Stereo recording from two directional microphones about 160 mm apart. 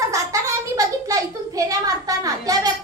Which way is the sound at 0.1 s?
20° right (ahead or behind).